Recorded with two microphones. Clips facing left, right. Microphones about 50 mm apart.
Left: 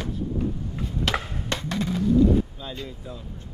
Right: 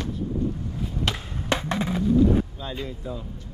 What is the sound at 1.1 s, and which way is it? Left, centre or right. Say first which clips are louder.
Chop: left 4 dB; centre.